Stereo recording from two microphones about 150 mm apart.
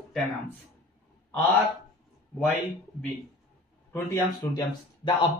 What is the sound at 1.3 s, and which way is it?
Speech, 15° left (ahead or behind).